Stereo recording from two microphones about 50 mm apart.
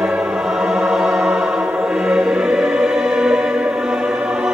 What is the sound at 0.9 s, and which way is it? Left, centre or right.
Music, centre.